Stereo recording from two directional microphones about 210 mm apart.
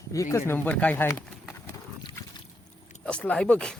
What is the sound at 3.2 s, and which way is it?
Speech, 5° left (ahead or behind).